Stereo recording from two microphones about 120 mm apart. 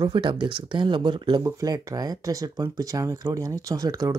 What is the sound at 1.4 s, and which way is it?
Speech, 30° right (ahead or behind).